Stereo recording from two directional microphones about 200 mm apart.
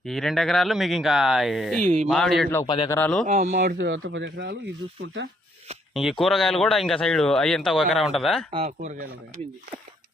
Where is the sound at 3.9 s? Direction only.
80° right; by 5.3 s 55° right (ahead or behind).